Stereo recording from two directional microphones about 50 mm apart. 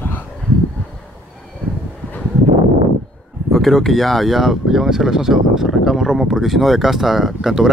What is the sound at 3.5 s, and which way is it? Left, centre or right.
Speech, centre.